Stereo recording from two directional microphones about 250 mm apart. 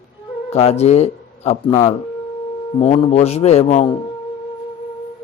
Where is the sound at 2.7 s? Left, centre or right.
Left.